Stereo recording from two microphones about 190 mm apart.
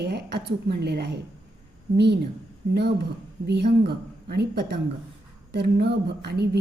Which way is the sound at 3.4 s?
60° right (ahead or behind).